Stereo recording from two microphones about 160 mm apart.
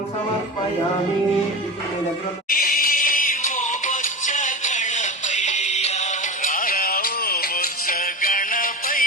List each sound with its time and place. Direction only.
2.5 s music: 60° left (ahead or behind)